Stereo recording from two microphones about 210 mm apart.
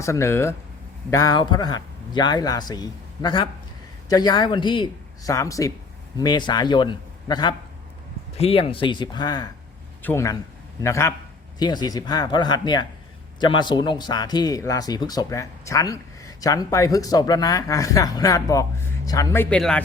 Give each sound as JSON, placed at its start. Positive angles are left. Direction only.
{"t": 0.0, "sound": "speech", "side_deg": 15}